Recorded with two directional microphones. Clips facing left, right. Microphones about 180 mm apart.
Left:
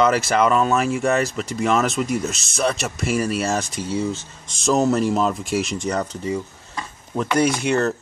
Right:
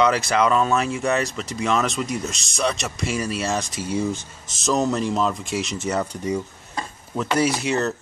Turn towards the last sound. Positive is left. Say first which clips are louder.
# left 2 dB
turn(degrees=0)  # may be behind; listen again after turning